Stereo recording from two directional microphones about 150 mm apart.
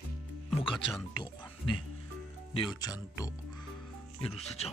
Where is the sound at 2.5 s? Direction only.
30° left (ahead or behind).